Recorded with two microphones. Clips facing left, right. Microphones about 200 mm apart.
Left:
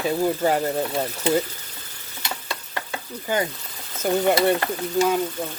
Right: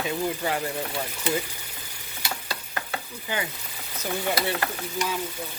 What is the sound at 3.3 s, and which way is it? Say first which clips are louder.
Speech: left 7 dB; 45° left (ahead or behind).